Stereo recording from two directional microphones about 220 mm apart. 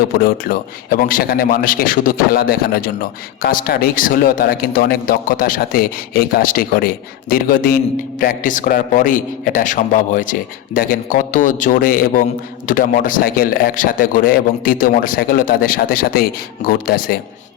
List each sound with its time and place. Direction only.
0.2 s a man's voice: 40° left (ahead or behind)